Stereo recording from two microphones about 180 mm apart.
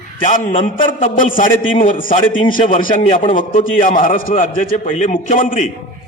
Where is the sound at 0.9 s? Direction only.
45° left (ahead or behind).